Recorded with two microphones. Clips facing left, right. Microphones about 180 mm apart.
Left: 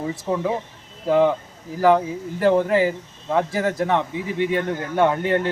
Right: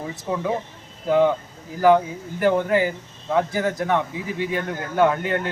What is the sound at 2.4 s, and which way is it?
Speech, 25° left (ahead or behind).